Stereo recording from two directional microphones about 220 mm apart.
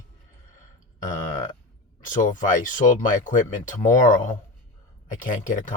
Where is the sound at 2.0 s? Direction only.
35° left (ahead or behind).